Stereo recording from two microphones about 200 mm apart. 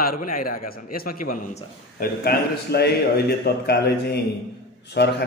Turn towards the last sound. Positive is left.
turn(degrees=55)  # may be behind; listen again after turning